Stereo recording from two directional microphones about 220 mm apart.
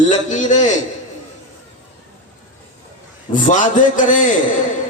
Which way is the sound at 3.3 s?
35° left (ahead or behind).